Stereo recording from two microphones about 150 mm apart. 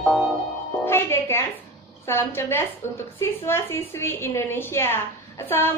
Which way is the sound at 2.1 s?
15° left (ahead or behind).